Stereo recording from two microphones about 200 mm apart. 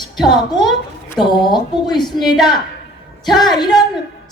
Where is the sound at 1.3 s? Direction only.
20° left (ahead or behind).